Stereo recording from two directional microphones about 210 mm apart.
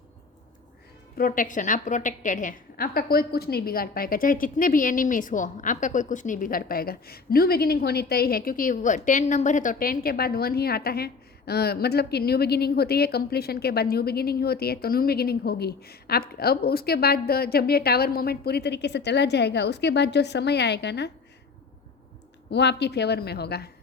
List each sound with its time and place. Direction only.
1.1 s a woman's voice: 40° left (ahead or behind)
22.4 s a woman's voice: 55° left (ahead or behind)